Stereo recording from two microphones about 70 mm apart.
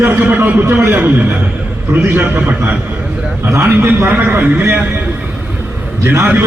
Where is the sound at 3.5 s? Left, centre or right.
Right.